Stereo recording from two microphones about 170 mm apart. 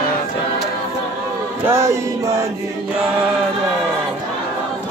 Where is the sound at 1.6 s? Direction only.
15° right (ahead or behind).